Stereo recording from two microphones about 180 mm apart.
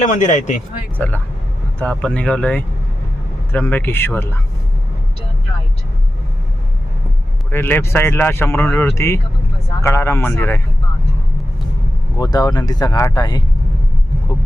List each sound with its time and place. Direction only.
0.0 s speech: 45° left (ahead or behind)
0.9 s speech: 10° left (ahead or behind)
7.5 s speech: 10° left (ahead or behind)
12.1 s speech: 20° left (ahead or behind)